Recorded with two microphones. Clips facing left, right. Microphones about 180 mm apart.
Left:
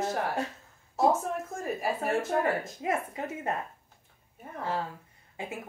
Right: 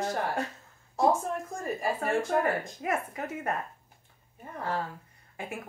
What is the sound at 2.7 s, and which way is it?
Speech, 25° left (ahead or behind).